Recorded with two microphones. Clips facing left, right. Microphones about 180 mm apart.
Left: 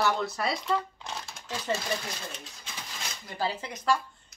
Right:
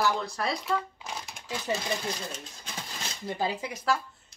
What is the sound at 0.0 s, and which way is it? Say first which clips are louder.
Speech: even; centre (ahead or behind).